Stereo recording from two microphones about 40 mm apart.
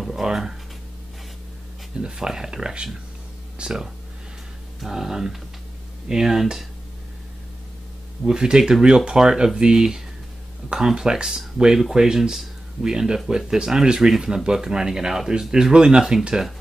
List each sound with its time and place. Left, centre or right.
0.0 s speech: centre
2.0 s speech: centre
4.8 s speech: centre
8.3 s speech: centre